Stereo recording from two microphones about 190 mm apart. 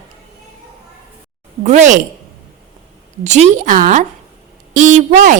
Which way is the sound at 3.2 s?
40° right (ahead or behind).